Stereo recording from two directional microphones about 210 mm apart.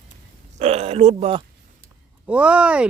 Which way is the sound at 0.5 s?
30° right (ahead or behind).